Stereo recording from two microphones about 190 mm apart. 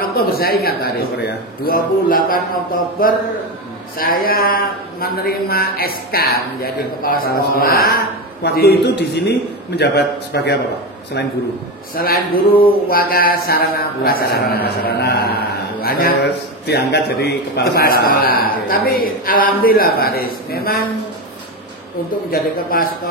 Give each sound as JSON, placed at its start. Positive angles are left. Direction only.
{"t": 0.0, "sound": "speech", "side_deg": 50}
{"t": 11.9, "sound": "speech", "side_deg": 50}
{"t": 22.3, "sound": "speech", "side_deg": 50}